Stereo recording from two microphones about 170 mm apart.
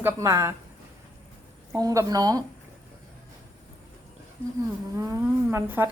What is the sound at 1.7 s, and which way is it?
Speech, 20° right (ahead or behind).